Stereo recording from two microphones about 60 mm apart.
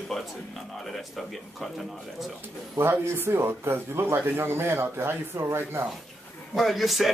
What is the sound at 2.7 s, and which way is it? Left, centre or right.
Speech, right.